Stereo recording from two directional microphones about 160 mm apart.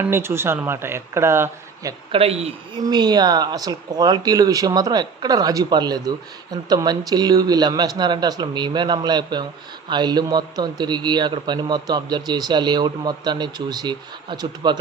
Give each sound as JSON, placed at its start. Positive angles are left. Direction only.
{"t": 0.0, "sound": "speech", "side_deg": -15}
{"t": 2.1, "sound": "speech", "side_deg": -35}
{"t": 2.8, "sound": "a man's voice", "side_deg": -25}